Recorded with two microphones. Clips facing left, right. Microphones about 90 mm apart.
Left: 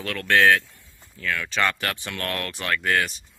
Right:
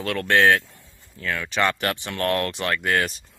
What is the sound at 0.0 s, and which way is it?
Speech, 25° right (ahead or behind).